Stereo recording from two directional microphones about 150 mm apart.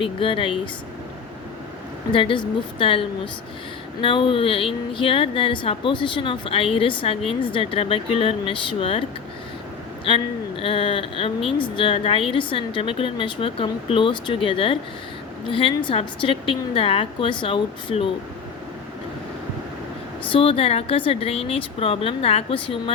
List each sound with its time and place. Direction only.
0.0 s a woman's voice: 35° left (ahead or behind)
2.1 s a woman's voice: 35° left (ahead or behind)
10.1 s a woman's voice: 40° left (ahead or behind)
20.3 s a woman's voice: 40° left (ahead or behind)